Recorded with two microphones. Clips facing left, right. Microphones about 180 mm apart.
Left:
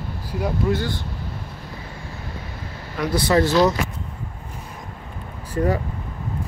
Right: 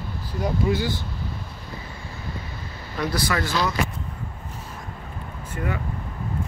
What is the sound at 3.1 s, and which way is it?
Speech, 25° left (ahead or behind).